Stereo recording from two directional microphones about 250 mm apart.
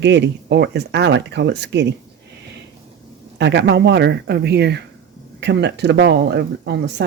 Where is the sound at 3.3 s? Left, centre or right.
Right.